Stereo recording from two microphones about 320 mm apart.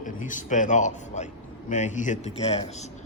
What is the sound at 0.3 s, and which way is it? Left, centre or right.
A man's voice, left.